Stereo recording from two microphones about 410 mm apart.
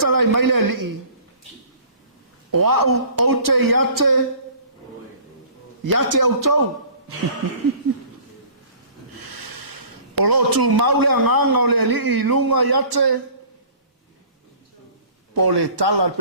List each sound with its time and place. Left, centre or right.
0.0 s a man's voice: right
2.5 s a man's voice: right
5.8 s a man's voice: right
9.3 s speech: right
15.4 s a man's voice: right